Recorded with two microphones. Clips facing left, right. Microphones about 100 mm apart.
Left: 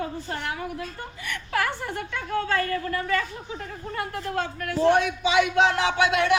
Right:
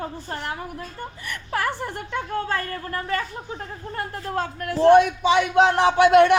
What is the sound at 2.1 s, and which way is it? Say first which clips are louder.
Speech: even; 35° right (ahead or behind).